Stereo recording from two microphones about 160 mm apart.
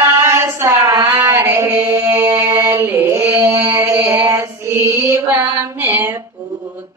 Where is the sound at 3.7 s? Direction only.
15° right (ahead or behind).